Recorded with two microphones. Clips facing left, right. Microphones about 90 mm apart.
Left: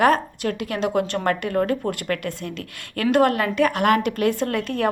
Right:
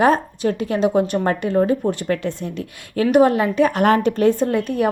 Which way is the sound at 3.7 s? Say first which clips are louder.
Right 3 dB; 35° right (ahead or behind).